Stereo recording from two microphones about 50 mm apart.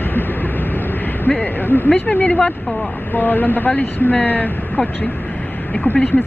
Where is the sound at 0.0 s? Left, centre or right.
Left.